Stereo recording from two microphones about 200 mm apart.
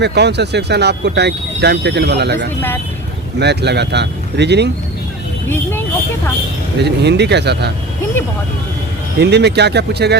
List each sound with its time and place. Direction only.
0.0 s speech: 60° right (ahead or behind)
6.7 s speech: 55° right (ahead or behind)
9.1 s speech: 55° right (ahead or behind)